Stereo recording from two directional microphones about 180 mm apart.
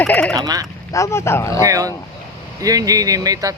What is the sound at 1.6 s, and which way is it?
Speech, 20° right (ahead or behind).